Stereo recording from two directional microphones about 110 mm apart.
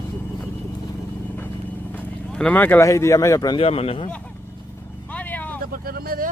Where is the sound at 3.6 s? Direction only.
65° left (ahead or behind).